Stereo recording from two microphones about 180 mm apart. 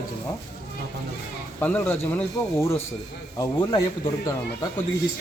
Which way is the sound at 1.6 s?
10° left (ahead or behind).